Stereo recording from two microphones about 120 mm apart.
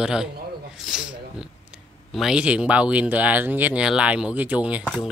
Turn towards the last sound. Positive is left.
turn(degrees=-10)  # may be behind; listen again after turning